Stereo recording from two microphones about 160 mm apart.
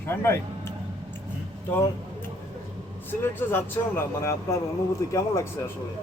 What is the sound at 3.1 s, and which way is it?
Speech, 10° left (ahead or behind).